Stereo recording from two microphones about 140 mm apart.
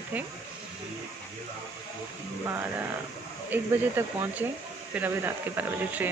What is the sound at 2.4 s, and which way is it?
Speech, 15° right (ahead or behind).